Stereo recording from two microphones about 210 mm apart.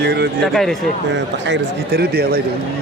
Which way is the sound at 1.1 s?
55° right (ahead or behind).